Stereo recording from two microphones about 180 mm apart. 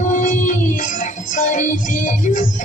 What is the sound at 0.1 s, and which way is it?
Music, 45° left (ahead or behind).